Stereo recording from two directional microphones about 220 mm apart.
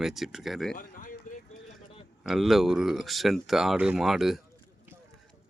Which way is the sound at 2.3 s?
Centre (ahead or behind).